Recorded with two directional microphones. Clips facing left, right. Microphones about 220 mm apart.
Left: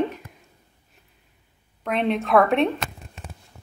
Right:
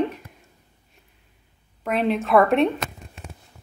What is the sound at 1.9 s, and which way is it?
Speech, centre (ahead or behind).